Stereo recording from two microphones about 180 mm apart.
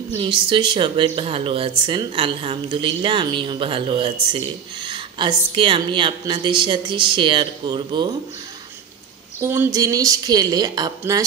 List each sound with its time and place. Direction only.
0.2 s speech: 25° right (ahead or behind)
9.4 s speech: 15° right (ahead or behind)